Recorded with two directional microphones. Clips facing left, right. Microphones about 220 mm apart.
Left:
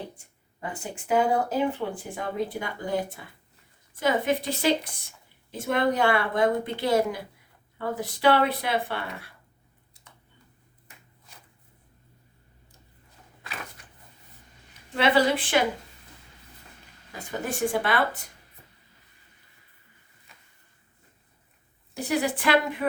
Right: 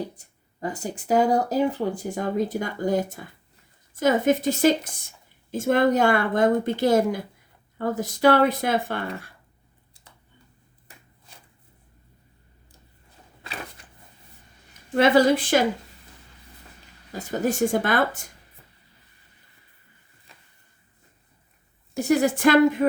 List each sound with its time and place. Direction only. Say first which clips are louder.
0.2 s speech: right 6 dB; 40° right (ahead or behind)
10.0 s a sound: right 1 dB; 30° right (ahead or behind)
14.7 s a woman's voice: right 5 dB; 45° right (ahead or behind)
17.4 s speech: right 5 dB; 40° right (ahead or behind)
21.9 s speech: right 6 dB; 45° right (ahead or behind)